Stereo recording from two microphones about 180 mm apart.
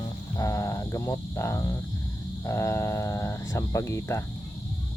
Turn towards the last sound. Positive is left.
turn(degrees=15)  # may be behind; listen again after turning